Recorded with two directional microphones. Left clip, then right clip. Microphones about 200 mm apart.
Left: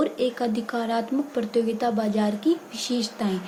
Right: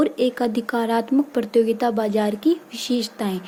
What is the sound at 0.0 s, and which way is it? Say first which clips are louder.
Speech: right 4 dB; 45° right (ahead or behind).